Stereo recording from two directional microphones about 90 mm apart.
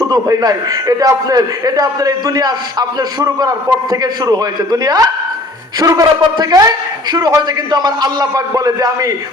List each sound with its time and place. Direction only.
0.0 s a man's voice: 45° right (ahead or behind)